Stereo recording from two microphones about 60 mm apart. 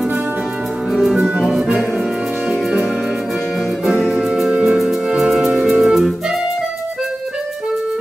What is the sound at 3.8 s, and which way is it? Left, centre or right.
Music, centre.